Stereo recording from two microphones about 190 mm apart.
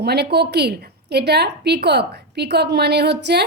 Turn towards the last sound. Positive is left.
turn(degrees=-60)  # may be behind; listen again after turning